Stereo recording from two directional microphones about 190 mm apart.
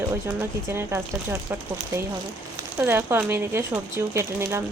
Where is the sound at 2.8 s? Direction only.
10° right (ahead or behind).